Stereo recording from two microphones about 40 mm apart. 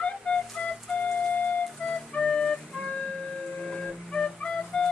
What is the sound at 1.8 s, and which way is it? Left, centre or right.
Music, left.